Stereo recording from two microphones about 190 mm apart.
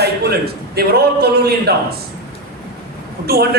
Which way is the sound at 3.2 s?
55° right (ahead or behind).